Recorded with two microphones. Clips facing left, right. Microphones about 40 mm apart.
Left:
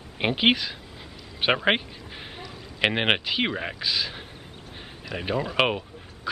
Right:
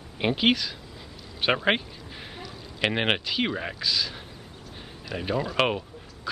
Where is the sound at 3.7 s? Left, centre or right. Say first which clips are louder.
Even; left.